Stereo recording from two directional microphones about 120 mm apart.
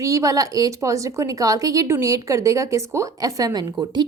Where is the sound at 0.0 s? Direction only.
25° right (ahead or behind).